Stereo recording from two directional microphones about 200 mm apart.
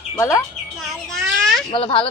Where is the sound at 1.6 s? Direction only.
25° left (ahead or behind).